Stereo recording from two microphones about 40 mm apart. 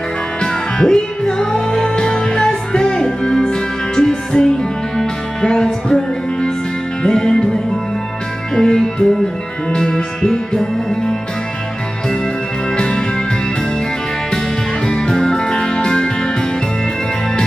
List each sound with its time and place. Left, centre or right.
0.4 s music: centre
8.5 s music: centre
12.7 s music: centre
14.9 s music: centre